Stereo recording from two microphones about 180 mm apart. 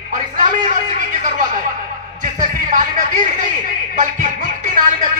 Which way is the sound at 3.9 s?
45° right (ahead or behind).